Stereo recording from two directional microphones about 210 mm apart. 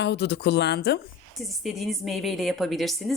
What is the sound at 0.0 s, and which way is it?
Speech, 55° left (ahead or behind).